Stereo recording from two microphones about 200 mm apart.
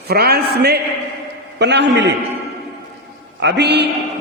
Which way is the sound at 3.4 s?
60° right (ahead or behind).